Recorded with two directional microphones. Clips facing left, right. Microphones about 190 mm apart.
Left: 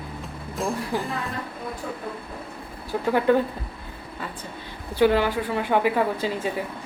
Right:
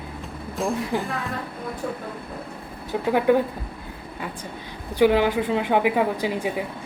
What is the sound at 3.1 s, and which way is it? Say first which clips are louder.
Speech: right 1 dB; 15° right (ahead or behind).